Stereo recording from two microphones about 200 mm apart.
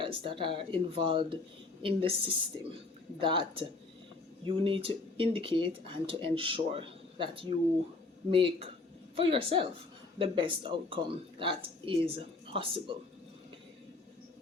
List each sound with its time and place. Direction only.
0.0 s speech: 25° right (ahead or behind)